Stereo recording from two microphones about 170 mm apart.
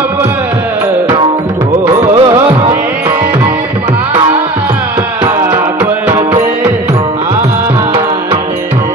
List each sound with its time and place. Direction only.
1.9 s music: 25° right (ahead or behind)
6.0 s music: 15° right (ahead or behind)